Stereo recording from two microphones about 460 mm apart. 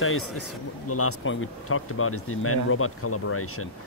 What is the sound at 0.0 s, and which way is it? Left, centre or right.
Speech, left.